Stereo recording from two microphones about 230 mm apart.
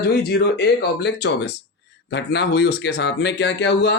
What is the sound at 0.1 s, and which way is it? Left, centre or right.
Speech, left.